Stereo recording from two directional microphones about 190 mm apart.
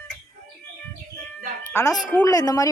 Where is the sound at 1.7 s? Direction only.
15° left (ahead or behind).